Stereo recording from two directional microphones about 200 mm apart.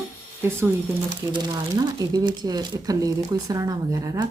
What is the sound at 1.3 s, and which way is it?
Speech, 20° right (ahead or behind).